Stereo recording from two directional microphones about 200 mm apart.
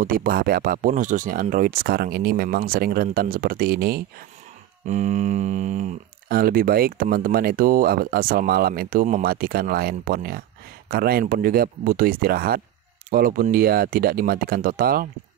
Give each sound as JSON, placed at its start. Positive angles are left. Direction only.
{"t": 0.0, "sound": "speech", "side_deg": -45}
{"t": 4.8, "sound": "speech", "side_deg": -35}